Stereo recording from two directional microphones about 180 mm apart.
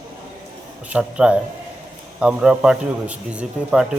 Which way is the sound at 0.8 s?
5° right (ahead or behind).